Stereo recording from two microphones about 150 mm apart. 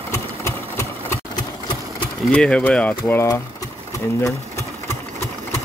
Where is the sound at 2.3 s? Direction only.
5° left (ahead or behind).